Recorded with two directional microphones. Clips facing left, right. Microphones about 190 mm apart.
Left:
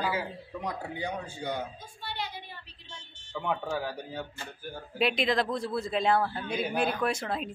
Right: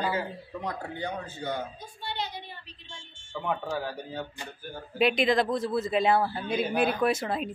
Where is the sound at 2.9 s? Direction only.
40° left (ahead or behind).